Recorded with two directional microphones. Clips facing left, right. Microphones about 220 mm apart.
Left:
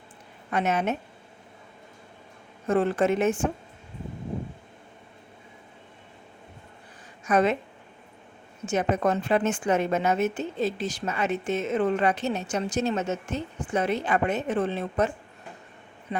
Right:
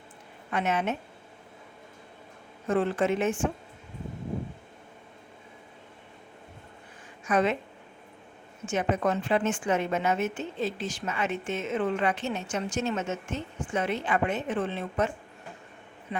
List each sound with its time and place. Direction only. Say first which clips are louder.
0.5 s a woman's voice: left 3 dB; 40° left (ahead or behind)
2.6 s a woman's voice: left 3 dB; 40° left (ahead or behind)
7.3 s a woman's voice: left 3 dB; 40° left (ahead or behind)
8.6 s a woman's voice: left 2 dB; 40° left (ahead or behind)